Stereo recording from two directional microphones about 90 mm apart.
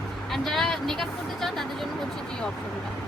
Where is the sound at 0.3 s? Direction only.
Centre (ahead or behind).